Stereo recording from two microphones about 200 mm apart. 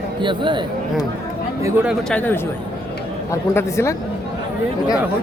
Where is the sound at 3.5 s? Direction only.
15° left (ahead or behind).